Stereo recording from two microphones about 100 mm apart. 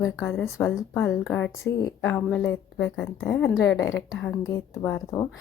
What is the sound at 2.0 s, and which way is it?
Speech, 20° left (ahead or behind).